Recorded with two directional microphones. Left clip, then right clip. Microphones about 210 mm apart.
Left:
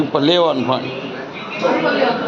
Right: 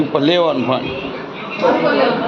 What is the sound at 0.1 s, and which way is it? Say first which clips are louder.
Speech: left 1 dB; 5° left (ahead or behind).